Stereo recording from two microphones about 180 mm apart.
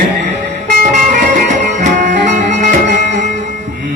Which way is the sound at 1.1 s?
45° right (ahead or behind).